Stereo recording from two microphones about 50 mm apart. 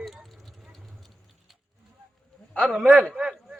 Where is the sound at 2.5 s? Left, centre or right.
Right.